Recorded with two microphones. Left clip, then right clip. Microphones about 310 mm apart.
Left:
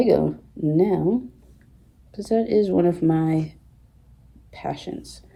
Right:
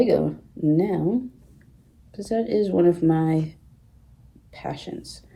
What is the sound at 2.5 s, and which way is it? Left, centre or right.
Speech, centre.